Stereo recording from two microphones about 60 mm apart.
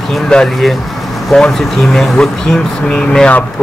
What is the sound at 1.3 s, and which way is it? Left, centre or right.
Speech, centre.